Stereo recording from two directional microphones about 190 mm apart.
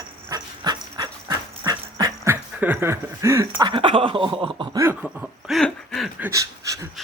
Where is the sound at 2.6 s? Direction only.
10° right (ahead or behind).